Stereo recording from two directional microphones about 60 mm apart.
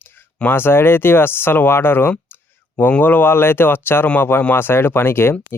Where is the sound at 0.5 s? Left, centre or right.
Left.